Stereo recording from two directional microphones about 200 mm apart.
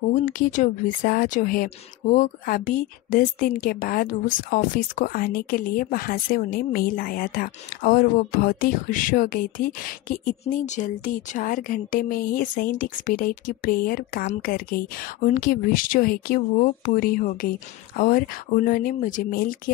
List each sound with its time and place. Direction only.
0.1 s a woman's voice: 40° left (ahead or behind)